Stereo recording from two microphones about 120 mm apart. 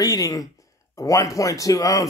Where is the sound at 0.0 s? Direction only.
30° left (ahead or behind).